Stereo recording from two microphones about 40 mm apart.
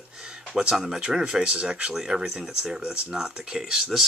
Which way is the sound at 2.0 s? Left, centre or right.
Centre.